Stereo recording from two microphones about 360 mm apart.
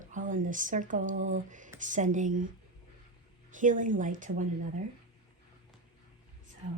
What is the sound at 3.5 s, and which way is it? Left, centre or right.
Speech, right.